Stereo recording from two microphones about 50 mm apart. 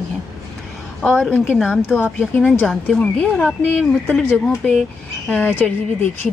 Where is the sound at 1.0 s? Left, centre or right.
Centre.